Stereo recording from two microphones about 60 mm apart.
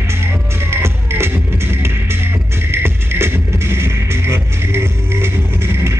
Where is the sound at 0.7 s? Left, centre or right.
Right.